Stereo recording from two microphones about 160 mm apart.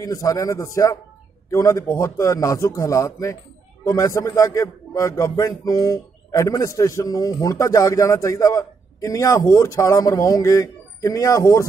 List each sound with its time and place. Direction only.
0.0 s a man's voice: 20° left (ahead or behind)